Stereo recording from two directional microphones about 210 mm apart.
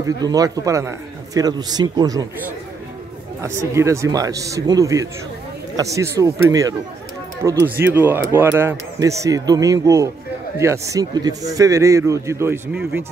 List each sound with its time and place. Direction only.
0.0 s speech: 15° right (ahead or behind)